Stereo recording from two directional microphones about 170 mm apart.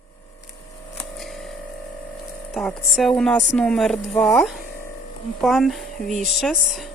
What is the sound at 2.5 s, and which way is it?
Speech, centre (ahead or behind).